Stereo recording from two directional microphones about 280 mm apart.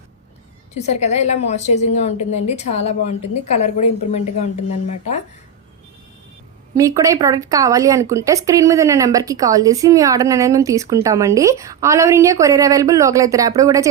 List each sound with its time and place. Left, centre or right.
0.7 s a woman's voice: left
6.7 s a woman's voice: centre